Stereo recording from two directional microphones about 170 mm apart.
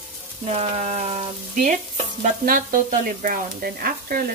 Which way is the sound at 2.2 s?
55° right (ahead or behind).